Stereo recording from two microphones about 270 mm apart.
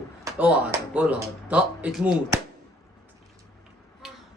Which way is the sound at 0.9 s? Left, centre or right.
Centre.